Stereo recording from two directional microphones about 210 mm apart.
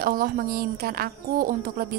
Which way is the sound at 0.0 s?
45° right (ahead or behind).